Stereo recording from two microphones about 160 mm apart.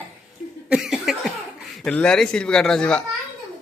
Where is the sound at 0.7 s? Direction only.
5° right (ahead or behind).